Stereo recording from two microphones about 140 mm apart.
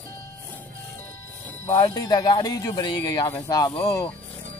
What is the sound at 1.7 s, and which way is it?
Speech, 25° left (ahead or behind).